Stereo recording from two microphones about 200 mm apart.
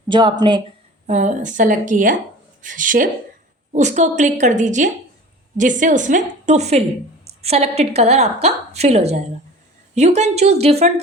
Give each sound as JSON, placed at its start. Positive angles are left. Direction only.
{"t": 0.1, "sound": "speech", "side_deg": -20}
{"t": 1.0, "sound": "a woman's voice", "side_deg": -35}